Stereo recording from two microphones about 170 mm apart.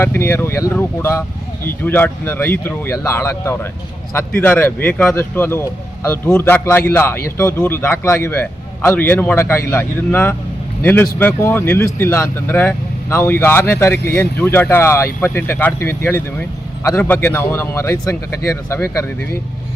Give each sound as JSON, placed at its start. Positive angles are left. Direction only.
{"t": 0.0, "sound": "speech", "side_deg": 15}